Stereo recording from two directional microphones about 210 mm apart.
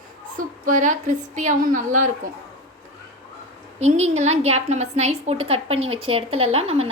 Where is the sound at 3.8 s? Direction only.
35° right (ahead or behind).